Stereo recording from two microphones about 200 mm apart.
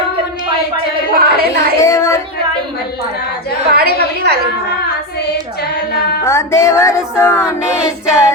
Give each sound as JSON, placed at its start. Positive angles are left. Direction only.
{"t": 1.1, "sound": "a woman's voice", "side_deg": -50}
{"t": 1.8, "sound": "child singing", "side_deg": 15}
{"t": 3.7, "sound": "a sound", "side_deg": -50}
{"t": 6.2, "sound": "music", "side_deg": 15}